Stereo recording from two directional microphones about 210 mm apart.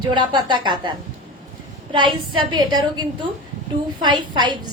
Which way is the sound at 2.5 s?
20° right (ahead or behind).